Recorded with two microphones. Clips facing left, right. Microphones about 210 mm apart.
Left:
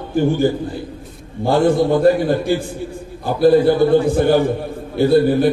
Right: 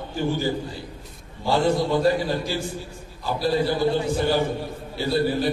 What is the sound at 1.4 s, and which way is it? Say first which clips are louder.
A man's voice: left 7 dB; 55° left (ahead or behind).